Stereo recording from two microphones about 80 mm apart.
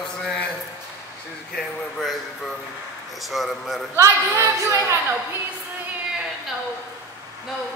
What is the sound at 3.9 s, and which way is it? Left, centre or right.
A woman's voice, right.